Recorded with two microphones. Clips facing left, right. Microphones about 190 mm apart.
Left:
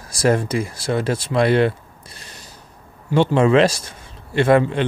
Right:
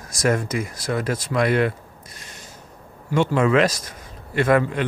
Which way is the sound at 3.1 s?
30° left (ahead or behind).